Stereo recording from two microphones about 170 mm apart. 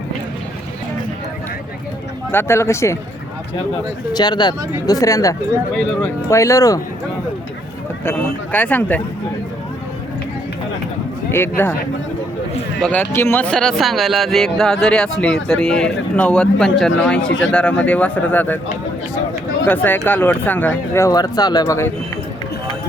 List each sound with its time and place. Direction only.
2.3 s speech: 15° left (ahead or behind)
4.1 s speech: 25° left (ahead or behind)
8.0 s speech: 10° left (ahead or behind)
11.3 s speech: 15° left (ahead or behind)
12.8 s speech: 10° left (ahead or behind)
19.6 s speech: 10° left (ahead or behind)